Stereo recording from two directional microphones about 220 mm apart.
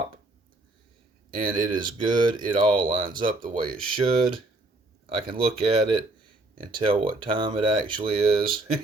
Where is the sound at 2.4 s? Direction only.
20° right (ahead or behind).